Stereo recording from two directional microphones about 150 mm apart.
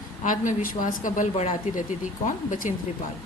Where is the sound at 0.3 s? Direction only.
65° left (ahead or behind).